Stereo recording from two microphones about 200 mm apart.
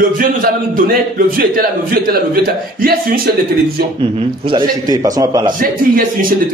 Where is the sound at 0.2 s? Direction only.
45° right (ahead or behind).